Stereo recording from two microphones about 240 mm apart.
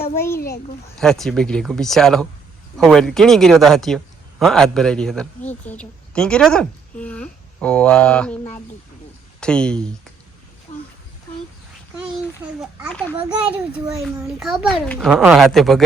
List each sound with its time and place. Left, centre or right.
0.0 s a child's voice: centre
0.3 s a child's voice: left
0.9 s a woman's voice: centre
9.4 s speech: centre
13.7 s speech: centre